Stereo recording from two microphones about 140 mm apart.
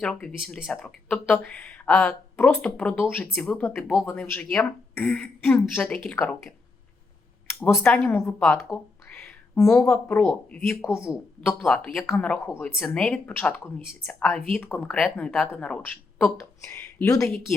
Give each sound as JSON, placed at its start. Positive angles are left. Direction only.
{"t": 0.0, "sound": "speech", "side_deg": 5}
{"t": 8.1, "sound": "a sound", "side_deg": 15}
{"t": 9.7, "sound": "speech", "side_deg": 15}
{"t": 11.6, "sound": "speech", "side_deg": 5}